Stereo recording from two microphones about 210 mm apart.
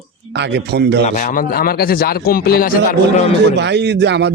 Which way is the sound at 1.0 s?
35° left (ahead or behind).